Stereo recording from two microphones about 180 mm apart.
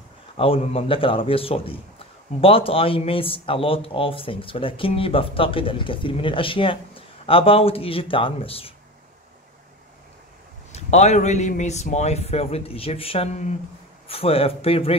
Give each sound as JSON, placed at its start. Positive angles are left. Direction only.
{"t": 0.4, "sound": "speech", "side_deg": 30}
{"t": 10.7, "sound": "speech", "side_deg": 40}